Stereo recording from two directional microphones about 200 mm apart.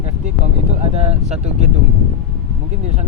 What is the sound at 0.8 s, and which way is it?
Speech, 35° right (ahead or behind).